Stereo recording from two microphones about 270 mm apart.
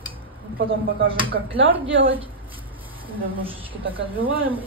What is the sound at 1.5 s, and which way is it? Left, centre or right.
Speech, right.